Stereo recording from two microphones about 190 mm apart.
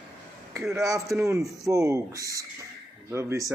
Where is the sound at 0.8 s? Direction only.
15° right (ahead or behind).